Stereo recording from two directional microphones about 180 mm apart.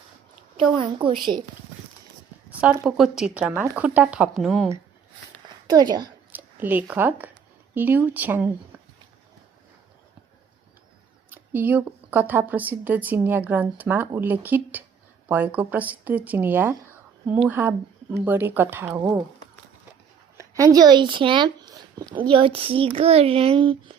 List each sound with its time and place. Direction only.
0.5 s a woman's voice: 30° right (ahead or behind)
2.6 s a woman's voice: 5° right (ahead or behind)
5.6 s a woman's voice: 20° right (ahead or behind)
6.3 s a woman's voice: 10° right (ahead or behind)
11.3 s a woman's voice: 10° right (ahead or behind)
20.3 s speech: 20° right (ahead or behind)